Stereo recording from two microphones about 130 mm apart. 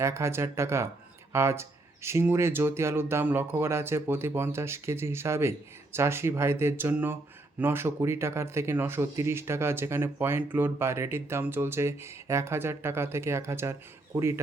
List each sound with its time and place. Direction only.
0.0 s speech: 20° right (ahead or behind)